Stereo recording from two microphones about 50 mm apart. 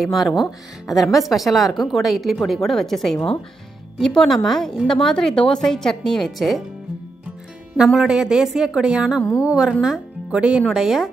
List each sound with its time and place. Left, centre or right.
0.0 s a woman's voice: centre
6.3 s a woman's voice: centre
7.7 s a woman's voice: centre
10.7 s a woman's voice: centre